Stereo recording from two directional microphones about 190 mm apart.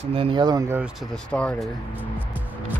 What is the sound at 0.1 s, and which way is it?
Speech, 25° right (ahead or behind).